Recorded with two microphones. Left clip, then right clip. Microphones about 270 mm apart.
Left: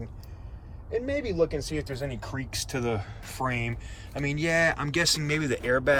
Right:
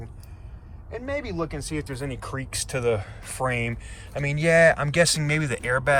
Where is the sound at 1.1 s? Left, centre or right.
Centre.